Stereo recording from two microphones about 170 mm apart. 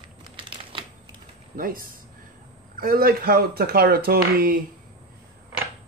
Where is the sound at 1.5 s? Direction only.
55° right (ahead or behind).